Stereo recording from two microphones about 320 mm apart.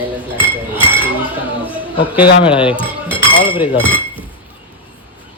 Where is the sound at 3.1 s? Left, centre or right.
Centre.